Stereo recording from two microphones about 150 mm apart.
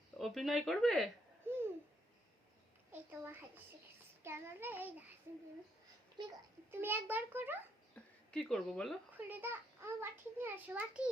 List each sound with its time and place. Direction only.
0.2 s speech: centre (ahead or behind)
1.5 s babbling: 15° right (ahead or behind)
2.9 s a child's voice: 10° right (ahead or behind)
6.2 s a child's voice: 30° right (ahead or behind)
6.7 s a child's voice: 15° right (ahead or behind)
7.9 s a woman's voice: 5° left (ahead or behind)
9.1 s a child's voice: 15° right (ahead or behind)